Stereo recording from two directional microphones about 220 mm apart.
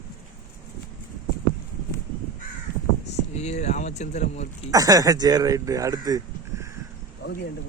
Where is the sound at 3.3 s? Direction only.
30° left (ahead or behind).